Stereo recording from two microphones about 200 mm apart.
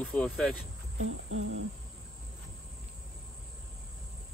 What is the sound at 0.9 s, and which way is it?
Cricket, 80° right.